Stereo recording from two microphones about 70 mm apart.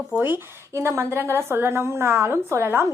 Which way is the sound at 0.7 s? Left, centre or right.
Right.